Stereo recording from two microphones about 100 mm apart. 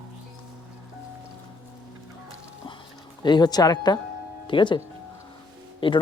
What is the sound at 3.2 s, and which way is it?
Speech, 45° left (ahead or behind).